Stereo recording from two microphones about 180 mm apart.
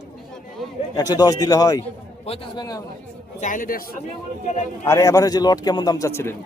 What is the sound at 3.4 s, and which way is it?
Speech, 45° left (ahead or behind).